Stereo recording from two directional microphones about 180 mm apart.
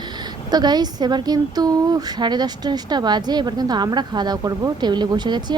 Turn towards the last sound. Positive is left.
turn(degrees=-25)  # may be behind; listen again after turning